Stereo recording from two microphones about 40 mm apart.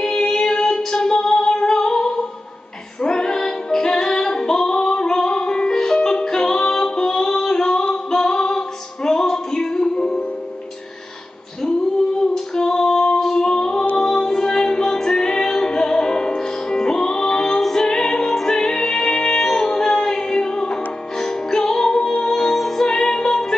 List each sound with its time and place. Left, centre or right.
0.0 s music: centre
7.9 s female singing: centre
12.5 s female singing: centre
13.9 s music: centre